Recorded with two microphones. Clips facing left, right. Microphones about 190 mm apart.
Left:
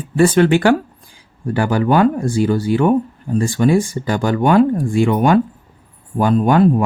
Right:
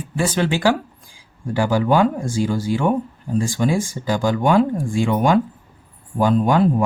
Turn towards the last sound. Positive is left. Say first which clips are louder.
# left 3 dB
turn(degrees=60)  # may be behind; listen again after turning